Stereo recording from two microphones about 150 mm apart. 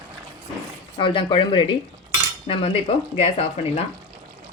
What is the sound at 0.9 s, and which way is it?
Speech, 35° left (ahead or behind).